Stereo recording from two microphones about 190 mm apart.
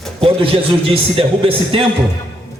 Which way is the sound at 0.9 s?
30° right (ahead or behind).